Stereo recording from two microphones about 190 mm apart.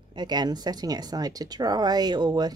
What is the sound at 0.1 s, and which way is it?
Speech, 20° right (ahead or behind).